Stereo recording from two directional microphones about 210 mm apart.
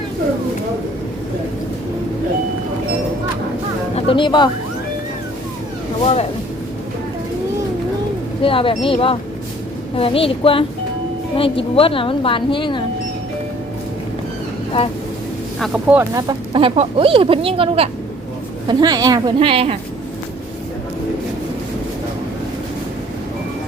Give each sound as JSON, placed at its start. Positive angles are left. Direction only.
{"t": 3.9, "sound": "speech", "side_deg": 25}
{"t": 8.4, "sound": "a woman's voice", "side_deg": 25}
{"t": 15.5, "sound": "speech", "side_deg": 0}